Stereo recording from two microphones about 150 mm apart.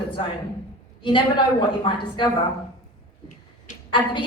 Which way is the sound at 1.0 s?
35° left (ahead or behind).